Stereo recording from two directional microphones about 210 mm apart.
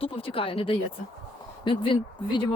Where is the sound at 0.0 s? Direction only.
25° left (ahead or behind).